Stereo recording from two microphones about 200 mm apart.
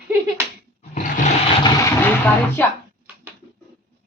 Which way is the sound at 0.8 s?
40° left (ahead or behind).